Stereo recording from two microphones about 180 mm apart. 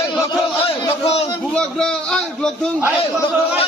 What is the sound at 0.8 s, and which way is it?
Speech, 30° left (ahead or behind).